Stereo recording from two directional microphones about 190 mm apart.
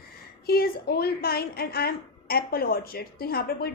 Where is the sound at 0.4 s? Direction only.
55° left (ahead or behind).